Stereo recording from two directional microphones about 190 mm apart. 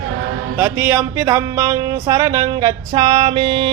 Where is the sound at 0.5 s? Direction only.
10° right (ahead or behind).